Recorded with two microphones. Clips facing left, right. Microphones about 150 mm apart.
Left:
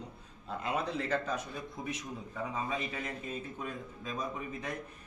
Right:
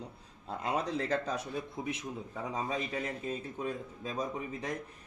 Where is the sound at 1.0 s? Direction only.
35° right (ahead or behind).